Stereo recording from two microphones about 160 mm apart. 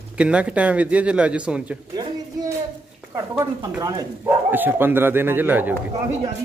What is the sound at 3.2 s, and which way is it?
Speech, 20° right (ahead or behind).